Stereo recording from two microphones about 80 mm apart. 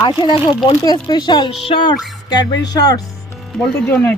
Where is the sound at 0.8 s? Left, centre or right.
Left.